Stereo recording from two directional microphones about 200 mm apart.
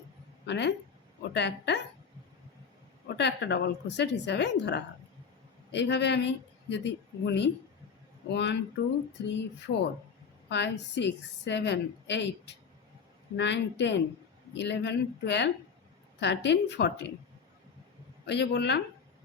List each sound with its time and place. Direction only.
0.4 s a woman's voice: 60° left (ahead or behind)
3.2 s a woman's voice: 60° left (ahead or behind)
18.3 s a woman's voice: 60° left (ahead or behind)